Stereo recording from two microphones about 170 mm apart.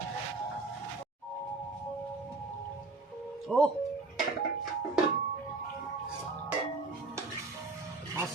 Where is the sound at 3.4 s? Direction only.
5° left (ahead or behind).